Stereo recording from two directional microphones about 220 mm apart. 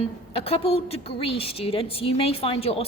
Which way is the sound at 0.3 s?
25° left (ahead or behind).